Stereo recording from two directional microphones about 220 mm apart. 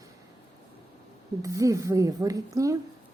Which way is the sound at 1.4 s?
15° right (ahead or behind).